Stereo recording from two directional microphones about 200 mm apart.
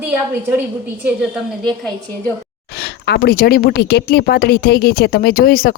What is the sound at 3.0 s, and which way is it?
Speech, 55° left (ahead or behind).